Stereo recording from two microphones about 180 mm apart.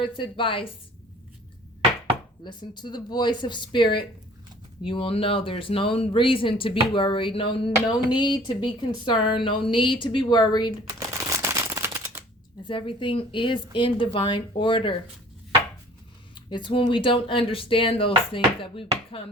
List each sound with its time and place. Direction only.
0.0 s speech: 30° left (ahead or behind)
2.4 s speech: 25° left (ahead or behind)
4.9 s speech: 30° left (ahead or behind)
10.8 s a sound: 15° right (ahead or behind)
12.6 s speech: 30° left (ahead or behind)
16.3 s speech: 25° left (ahead or behind)